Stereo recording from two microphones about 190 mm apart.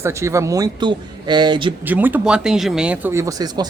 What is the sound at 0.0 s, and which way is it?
Speech, 15° right (ahead or behind).